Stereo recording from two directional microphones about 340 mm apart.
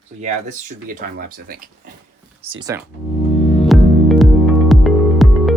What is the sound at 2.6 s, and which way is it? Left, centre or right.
Speech, centre.